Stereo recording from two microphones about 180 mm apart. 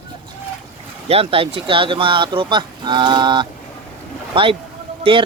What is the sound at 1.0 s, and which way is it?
Speech, 30° right (ahead or behind).